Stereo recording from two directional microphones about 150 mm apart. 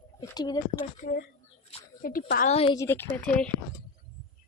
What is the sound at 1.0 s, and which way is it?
Speech, 65° left (ahead or behind).